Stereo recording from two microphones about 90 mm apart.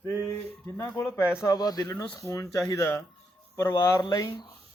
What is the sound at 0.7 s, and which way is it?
Speech, 25° left (ahead or behind).